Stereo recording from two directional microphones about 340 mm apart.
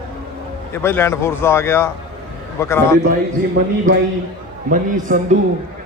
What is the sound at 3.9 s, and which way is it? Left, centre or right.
A man's voice, right.